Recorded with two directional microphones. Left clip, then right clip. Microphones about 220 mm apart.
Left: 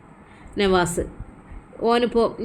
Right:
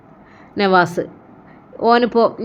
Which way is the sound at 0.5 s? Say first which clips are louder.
Right 6 dB; 5° right (ahead or behind).